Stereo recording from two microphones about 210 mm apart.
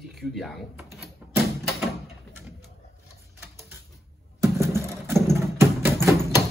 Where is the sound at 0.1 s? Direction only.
Centre (ahead or behind).